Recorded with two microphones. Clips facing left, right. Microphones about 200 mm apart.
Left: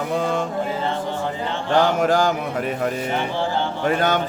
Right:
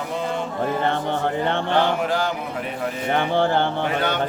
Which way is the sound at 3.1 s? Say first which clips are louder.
Right 3 dB; 60° right (ahead or behind).